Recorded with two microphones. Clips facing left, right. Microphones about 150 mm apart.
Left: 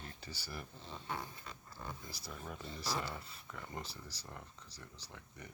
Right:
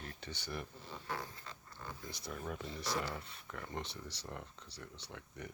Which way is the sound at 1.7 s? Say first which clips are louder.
Even; 5° left (ahead or behind).